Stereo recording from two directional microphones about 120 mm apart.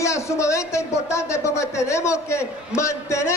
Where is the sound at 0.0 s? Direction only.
25° left (ahead or behind).